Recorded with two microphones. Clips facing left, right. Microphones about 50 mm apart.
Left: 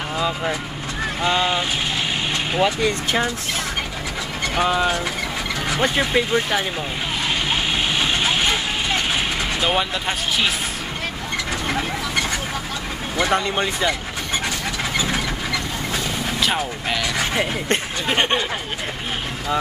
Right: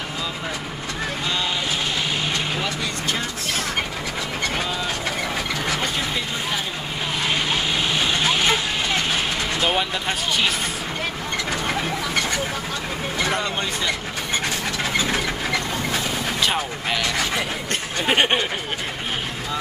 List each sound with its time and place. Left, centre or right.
1.2 s speech: left
2.6 s speech: left
4.6 s speech: left
13.3 s speech: left
16.3 s speech: centre
18.0 s speech: centre